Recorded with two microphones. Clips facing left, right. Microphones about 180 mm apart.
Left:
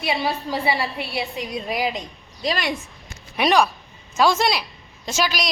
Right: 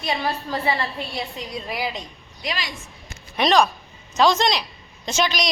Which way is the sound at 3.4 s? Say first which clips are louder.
Even; 10° left (ahead or behind).